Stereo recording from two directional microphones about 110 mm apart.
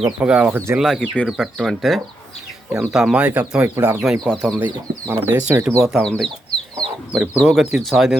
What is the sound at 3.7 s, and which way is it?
Speech, 25° right (ahead or behind).